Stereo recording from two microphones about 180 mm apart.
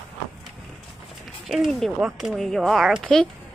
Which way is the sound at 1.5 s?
Centre (ahead or behind).